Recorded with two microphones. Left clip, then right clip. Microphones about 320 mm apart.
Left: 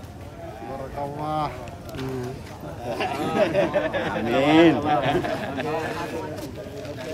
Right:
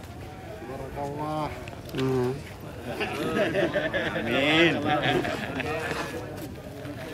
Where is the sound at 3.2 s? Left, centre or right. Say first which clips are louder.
Left 4 dB; left.